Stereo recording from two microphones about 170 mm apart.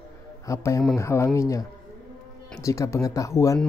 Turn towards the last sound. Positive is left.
turn(degrees=20)  # may be behind; listen again after turning